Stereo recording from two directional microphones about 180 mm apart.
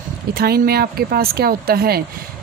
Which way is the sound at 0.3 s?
55° right (ahead or behind).